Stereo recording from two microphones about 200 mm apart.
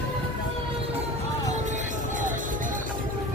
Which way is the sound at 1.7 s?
40° right (ahead or behind).